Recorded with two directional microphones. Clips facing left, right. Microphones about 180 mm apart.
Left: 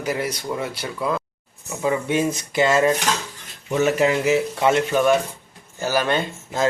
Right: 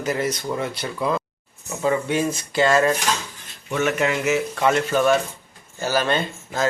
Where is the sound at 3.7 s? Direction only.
35° left (ahead or behind).